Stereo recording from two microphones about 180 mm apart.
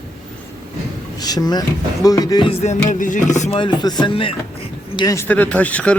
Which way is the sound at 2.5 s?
35° left (ahead or behind).